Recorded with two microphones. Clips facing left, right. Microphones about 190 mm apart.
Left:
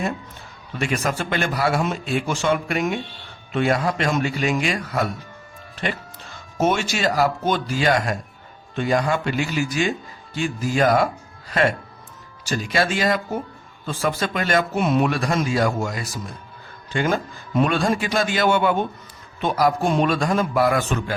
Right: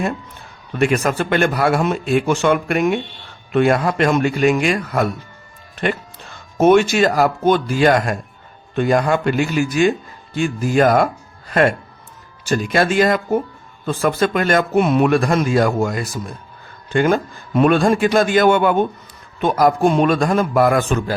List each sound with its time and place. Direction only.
0.8 s speech: 55° right (ahead or behind)
6.6 s a man's voice: 55° right (ahead or behind)